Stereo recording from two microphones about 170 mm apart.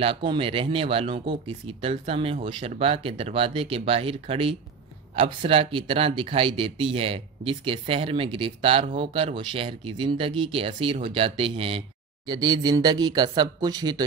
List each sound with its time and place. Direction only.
0.0 s speech: 30° right (ahead or behind)